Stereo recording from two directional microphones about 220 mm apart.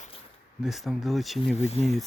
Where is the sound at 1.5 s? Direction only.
30° left (ahead or behind).